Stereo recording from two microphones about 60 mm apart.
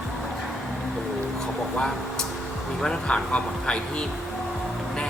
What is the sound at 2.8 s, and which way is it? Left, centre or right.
Speech, centre.